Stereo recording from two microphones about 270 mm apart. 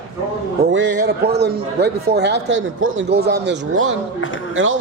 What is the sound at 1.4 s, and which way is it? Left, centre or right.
Speech, right.